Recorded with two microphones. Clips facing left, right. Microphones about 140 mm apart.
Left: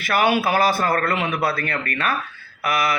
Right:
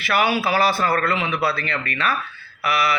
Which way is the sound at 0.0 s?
50° left (ahead or behind).